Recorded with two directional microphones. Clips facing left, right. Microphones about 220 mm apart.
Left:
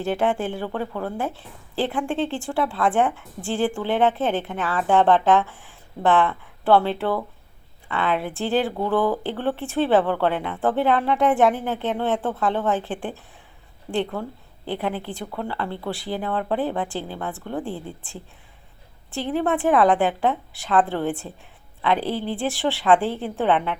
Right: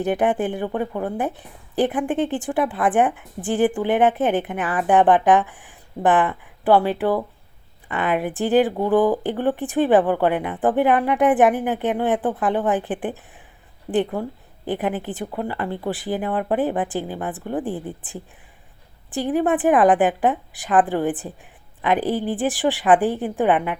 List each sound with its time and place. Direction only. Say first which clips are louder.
0.0 s a woman's voice: right 3 dB; 20° right (ahead or behind)